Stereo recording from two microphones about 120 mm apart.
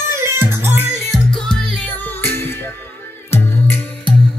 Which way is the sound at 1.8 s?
15° left (ahead or behind).